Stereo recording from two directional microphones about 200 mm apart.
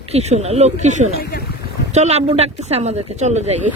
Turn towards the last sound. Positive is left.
turn(degrees=-35)  # may be behind; listen again after turning